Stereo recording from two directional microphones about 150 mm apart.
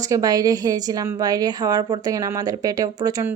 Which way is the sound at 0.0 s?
25° right (ahead or behind).